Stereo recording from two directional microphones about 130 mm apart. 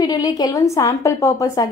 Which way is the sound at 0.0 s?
30° left (ahead or behind).